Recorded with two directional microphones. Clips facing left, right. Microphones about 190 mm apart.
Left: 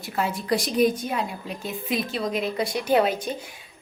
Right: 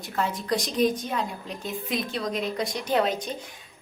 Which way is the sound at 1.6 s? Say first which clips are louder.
Left 2 dB; 5° left (ahead or behind).